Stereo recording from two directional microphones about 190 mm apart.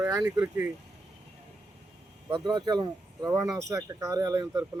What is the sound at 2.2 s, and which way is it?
Speech, 25° right (ahead or behind).